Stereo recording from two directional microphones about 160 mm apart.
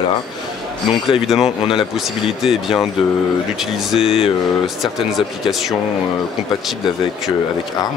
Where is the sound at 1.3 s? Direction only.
5° right (ahead or behind).